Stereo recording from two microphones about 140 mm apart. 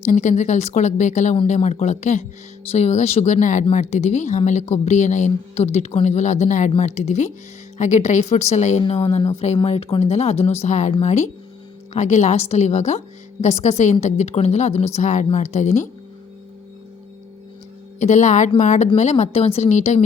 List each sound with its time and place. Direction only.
0.0 s speech: 55° left (ahead or behind)
9.0 s speech: 40° left (ahead or behind); by 15.9 s 55° left (ahead or behind)
18.0 s speech: 55° left (ahead or behind)